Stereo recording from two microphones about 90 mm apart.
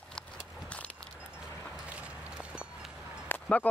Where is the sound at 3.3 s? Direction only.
15° left (ahead or behind).